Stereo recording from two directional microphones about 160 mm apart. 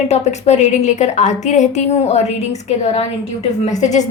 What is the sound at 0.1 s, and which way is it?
A woman's voice, 45° left (ahead or behind).